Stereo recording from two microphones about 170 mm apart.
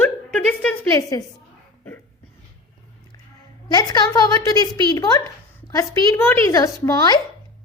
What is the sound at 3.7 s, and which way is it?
A woman's voice, 25° left (ahead or behind).